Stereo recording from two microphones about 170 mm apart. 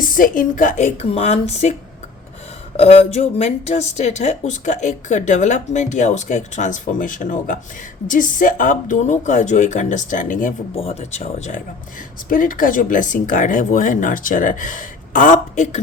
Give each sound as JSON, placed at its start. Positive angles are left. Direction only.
{"t": 0.0, "sound": "speech", "side_deg": 50}
{"t": 2.7, "sound": "speech", "side_deg": 40}
{"t": 10.8, "sound": "speech", "side_deg": 40}
{"t": 12.3, "sound": "speech", "side_deg": 55}